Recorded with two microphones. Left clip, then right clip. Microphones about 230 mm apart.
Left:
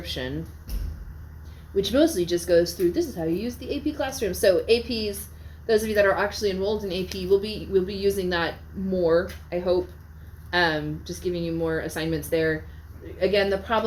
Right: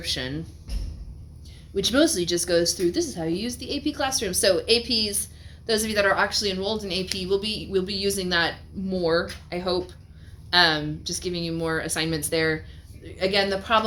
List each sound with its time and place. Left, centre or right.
0.0 s speech: right
1.7 s a woman's voice: right